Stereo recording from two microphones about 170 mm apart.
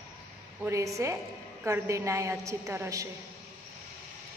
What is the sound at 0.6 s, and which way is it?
A woman's voice, 20° right (ahead or behind).